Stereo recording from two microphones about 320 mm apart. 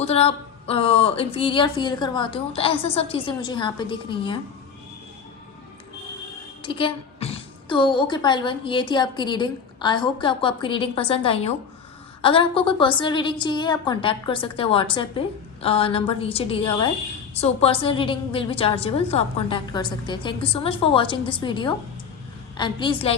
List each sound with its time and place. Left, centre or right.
0.0 s a woman's voice: centre
6.6 s a woman's voice: centre